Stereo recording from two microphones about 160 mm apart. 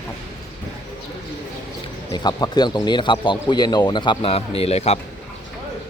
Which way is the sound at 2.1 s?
25° left (ahead or behind).